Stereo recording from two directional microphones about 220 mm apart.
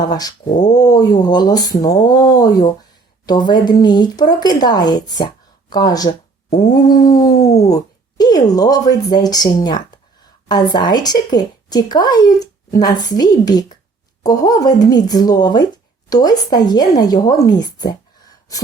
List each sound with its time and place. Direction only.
0.0 s speech: 20° left (ahead or behind)
10.5 s speech: 20° left (ahead or behind)